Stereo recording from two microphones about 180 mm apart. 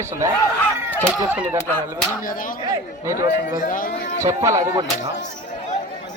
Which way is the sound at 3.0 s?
15° right (ahead or behind).